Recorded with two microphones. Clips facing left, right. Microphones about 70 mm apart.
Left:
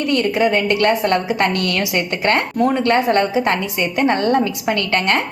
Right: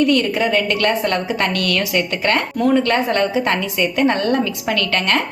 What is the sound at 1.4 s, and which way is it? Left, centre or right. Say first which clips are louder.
Speech: left 1 dB; left.